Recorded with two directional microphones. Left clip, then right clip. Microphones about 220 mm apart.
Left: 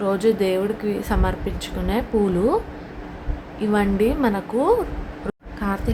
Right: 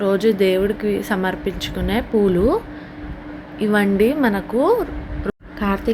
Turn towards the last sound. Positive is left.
turn(degrees=-15)  # may be behind; listen again after turning